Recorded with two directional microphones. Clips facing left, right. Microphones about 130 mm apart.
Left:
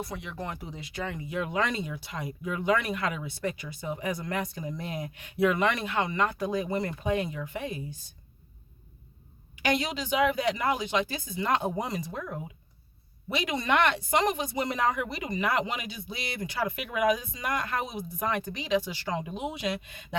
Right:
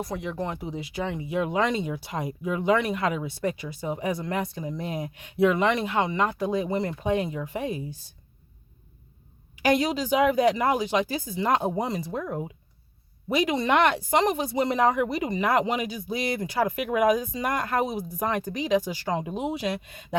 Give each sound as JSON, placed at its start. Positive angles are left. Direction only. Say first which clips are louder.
{"t": 0.0, "sound": "speech", "louder": "right 6 dB", "side_deg": -40}
{"t": 0.4, "sound": "speech", "louder": "right 6 dB", "side_deg": -25}
{"t": 9.6, "sound": "speech", "louder": "right 6 dB", "side_deg": -40}